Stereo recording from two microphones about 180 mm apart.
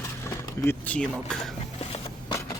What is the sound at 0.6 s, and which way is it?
Speech, 10° left (ahead or behind).